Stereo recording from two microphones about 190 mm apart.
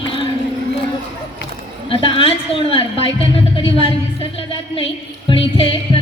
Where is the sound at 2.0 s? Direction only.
30° left (ahead or behind).